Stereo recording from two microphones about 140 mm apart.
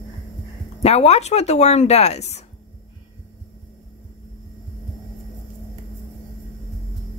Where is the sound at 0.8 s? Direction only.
50° left (ahead or behind).